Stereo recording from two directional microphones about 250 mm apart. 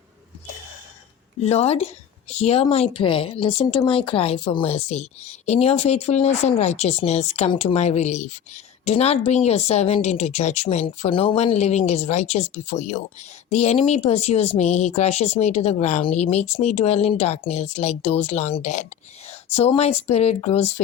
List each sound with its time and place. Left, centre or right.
1.4 s speech: left